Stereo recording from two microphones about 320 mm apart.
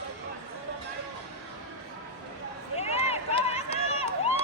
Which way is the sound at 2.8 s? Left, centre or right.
Centre.